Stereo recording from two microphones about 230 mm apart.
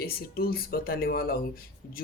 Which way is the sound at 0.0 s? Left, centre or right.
Left.